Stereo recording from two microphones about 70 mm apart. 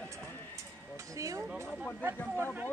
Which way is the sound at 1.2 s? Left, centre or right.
Right.